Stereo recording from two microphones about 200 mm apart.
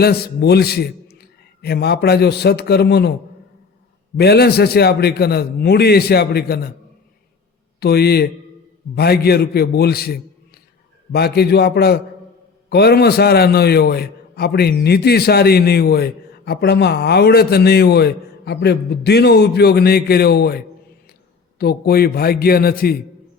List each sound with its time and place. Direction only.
0.0 s a man's voice: 50° left (ahead or behind)
4.2 s a man's voice: 55° left (ahead or behind)
7.8 s a man's voice: 50° left (ahead or behind)